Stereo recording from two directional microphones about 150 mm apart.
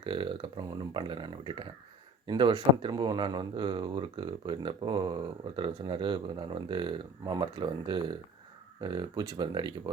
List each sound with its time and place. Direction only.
0.0 s speech: 35° right (ahead or behind)